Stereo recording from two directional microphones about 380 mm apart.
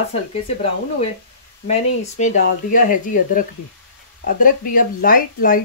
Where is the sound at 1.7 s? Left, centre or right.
Centre.